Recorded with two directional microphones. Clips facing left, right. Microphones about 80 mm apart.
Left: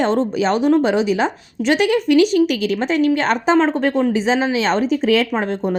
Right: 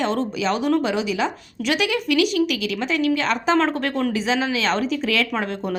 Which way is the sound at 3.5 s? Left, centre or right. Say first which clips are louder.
Left 5 dB; left.